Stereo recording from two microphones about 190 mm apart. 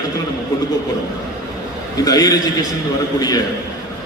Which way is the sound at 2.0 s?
20° left (ahead or behind).